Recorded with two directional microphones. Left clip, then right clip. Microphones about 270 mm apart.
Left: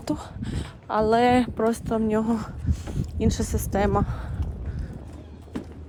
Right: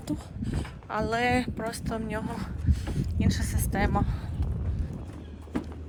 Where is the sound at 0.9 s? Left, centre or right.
Centre.